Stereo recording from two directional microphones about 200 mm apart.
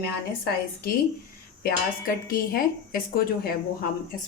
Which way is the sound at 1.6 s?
50° left (ahead or behind).